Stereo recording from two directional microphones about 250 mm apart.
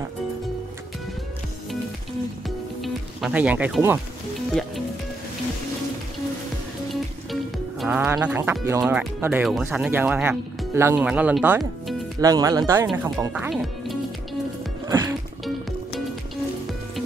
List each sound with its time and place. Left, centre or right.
2.4 s music: centre
6.9 s speech: centre
14.9 s music: centre